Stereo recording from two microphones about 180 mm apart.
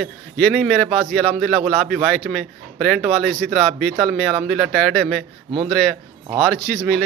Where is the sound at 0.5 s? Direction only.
5° left (ahead or behind).